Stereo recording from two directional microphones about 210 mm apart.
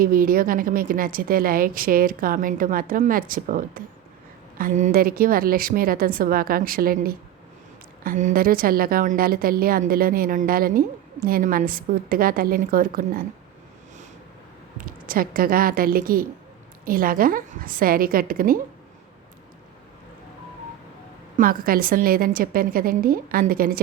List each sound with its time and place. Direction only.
0.0 s a woman's voice: 40° right (ahead or behind)
14.8 s a woman's voice: 40° right (ahead or behind)
21.3 s a woman's voice: 40° right (ahead or behind)